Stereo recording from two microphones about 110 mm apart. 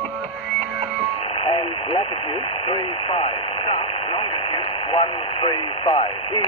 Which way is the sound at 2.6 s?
65° left (ahead or behind).